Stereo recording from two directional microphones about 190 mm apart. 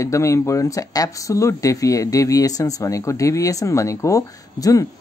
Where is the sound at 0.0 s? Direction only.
15° left (ahead or behind).